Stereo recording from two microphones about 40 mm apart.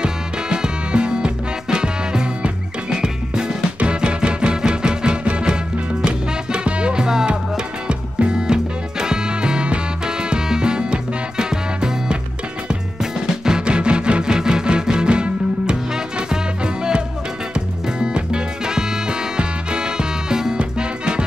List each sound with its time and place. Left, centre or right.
0.0 s music: right